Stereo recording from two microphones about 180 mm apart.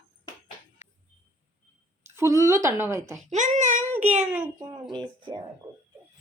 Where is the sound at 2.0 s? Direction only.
15° right (ahead or behind).